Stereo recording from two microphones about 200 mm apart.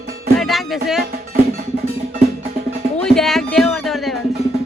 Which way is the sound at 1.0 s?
50° right (ahead or behind).